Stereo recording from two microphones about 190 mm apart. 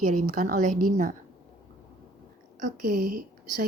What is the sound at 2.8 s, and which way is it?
Speech, 45° right (ahead or behind).